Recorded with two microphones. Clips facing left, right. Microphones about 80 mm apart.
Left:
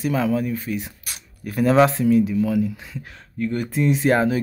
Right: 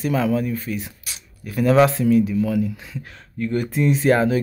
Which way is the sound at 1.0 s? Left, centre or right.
Left.